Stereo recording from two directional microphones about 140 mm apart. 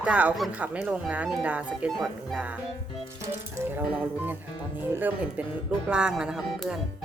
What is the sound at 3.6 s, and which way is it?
Music, 20° right (ahead or behind).